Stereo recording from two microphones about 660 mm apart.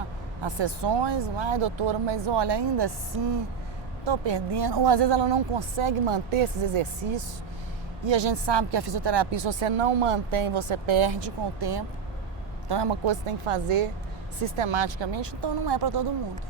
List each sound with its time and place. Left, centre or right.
0.4 s speech: right